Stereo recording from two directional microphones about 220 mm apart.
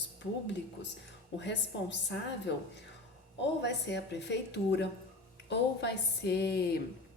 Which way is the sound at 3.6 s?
50° left (ahead or behind).